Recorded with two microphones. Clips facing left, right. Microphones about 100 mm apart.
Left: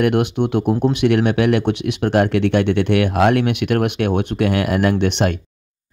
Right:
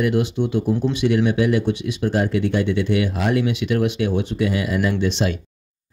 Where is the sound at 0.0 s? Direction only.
65° left (ahead or behind).